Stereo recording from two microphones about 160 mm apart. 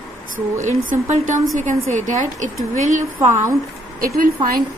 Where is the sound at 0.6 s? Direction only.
50° right (ahead or behind).